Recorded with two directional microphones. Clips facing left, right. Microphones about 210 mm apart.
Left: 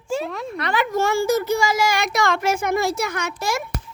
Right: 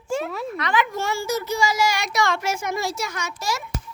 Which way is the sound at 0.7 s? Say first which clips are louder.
Left 5 dB; 45° left (ahead or behind).